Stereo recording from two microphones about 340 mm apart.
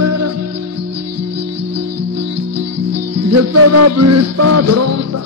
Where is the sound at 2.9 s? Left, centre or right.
Right.